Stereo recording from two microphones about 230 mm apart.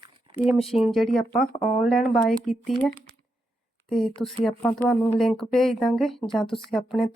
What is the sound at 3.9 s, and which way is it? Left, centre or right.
Speech, centre.